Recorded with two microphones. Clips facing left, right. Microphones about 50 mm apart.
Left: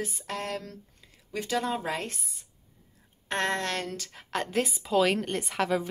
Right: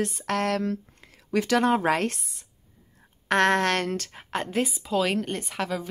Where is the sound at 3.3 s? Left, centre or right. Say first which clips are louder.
Right 8 dB; right.